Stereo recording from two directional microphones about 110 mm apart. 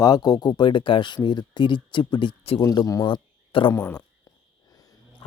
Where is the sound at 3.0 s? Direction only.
50° left (ahead or behind).